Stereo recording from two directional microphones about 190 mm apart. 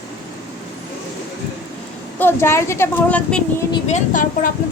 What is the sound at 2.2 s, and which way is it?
A woman's voice, 10° left (ahead or behind).